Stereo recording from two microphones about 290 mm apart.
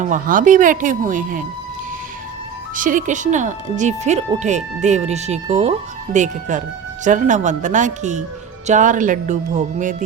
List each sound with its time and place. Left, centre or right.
0.0 s speech: right
2.7 s speech: right